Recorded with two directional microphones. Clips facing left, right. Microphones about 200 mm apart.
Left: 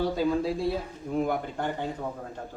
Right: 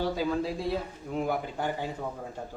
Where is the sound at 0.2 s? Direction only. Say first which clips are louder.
Left 3 dB; centre (ahead or behind).